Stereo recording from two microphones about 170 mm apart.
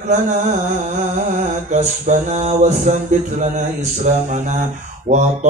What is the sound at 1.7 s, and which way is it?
Mantra, 45° right (ahead or behind).